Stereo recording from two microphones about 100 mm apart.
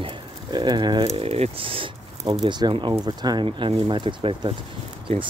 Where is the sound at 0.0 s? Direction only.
50° right (ahead or behind).